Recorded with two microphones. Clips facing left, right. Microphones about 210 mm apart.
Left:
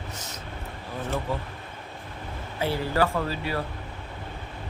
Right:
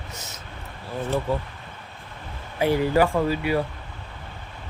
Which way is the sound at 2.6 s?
15° right (ahead or behind).